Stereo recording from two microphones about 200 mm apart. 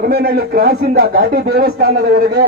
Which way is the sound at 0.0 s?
50° right (ahead or behind).